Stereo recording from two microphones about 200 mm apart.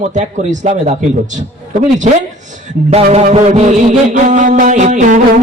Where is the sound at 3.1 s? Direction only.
35° right (ahead or behind).